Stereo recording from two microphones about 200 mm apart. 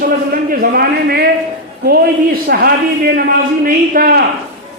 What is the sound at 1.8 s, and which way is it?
A man's voice, 50° right (ahead or behind).